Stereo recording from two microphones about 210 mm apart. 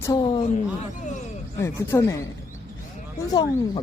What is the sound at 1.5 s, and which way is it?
Speech, 15° left (ahead or behind).